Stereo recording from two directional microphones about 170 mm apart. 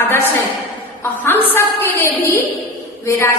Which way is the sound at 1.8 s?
15° left (ahead or behind).